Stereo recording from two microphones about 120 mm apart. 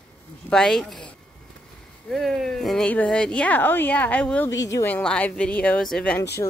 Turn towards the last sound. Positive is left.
turn(degrees=20)  # may be behind; listen again after turning